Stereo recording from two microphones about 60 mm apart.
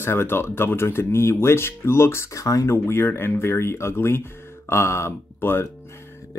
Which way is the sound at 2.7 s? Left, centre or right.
Left.